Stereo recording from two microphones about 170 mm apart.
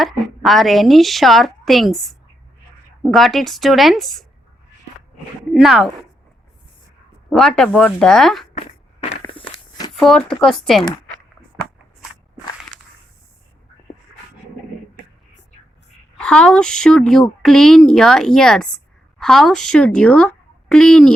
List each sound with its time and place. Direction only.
0.0 s a woman's voice: centre (ahead or behind)
5.5 s a woman's voice: centre (ahead or behind)
7.3 s a woman's voice: 5° left (ahead or behind)
8.5 s a sound: 40° left (ahead or behind)
9.2 s walk: 25° left (ahead or behind)
9.9 s a woman's voice: centre (ahead or behind)
16.1 s a woman's voice: 5° left (ahead or behind)